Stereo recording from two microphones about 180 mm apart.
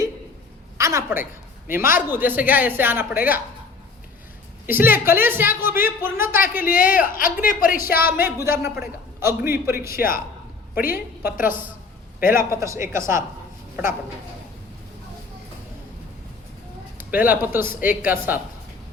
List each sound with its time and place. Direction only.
0.8 s a woman's voice: 15° right (ahead or behind)
4.6 s speech: 10° right (ahead or behind)
6.7 s a woman's voice: 50° left (ahead or behind)
7.9 s speech: 10° right (ahead or behind)
10.8 s a woman's voice: 55° left (ahead or behind)
12.2 s speech: 15° right (ahead or behind)
17.0 s speech: 10° right (ahead or behind)